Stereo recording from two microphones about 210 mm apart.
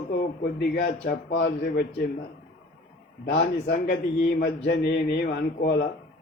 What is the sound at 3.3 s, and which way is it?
A man's voice, 50° left (ahead or behind).